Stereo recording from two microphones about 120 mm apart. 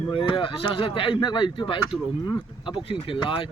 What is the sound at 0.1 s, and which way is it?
Speech, 45° left (ahead or behind).